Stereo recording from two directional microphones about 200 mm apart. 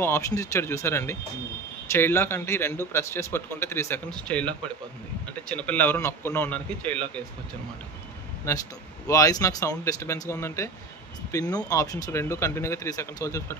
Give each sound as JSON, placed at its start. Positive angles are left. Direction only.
{"t": 0.0, "sound": "a man's voice", "side_deg": 15}
{"t": 9.0, "sound": "a man's voice", "side_deg": 15}